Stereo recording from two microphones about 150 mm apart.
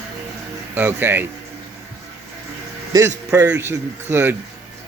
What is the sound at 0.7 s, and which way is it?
Speech, 15° right (ahead or behind).